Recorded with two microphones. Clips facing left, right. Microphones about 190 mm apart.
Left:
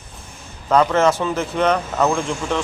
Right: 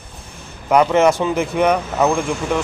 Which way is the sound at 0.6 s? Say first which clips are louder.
Right 2 dB; 15° right (ahead or behind).